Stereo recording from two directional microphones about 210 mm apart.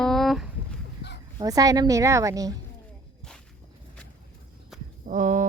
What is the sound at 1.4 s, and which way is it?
Speech, 15° right (ahead or behind).